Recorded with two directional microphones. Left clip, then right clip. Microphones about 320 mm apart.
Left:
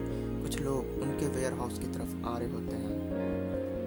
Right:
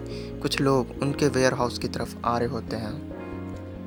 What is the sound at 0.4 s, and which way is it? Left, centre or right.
Speech, left.